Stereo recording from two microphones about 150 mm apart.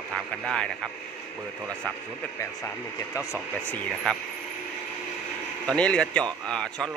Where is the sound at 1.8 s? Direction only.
10° left (ahead or behind).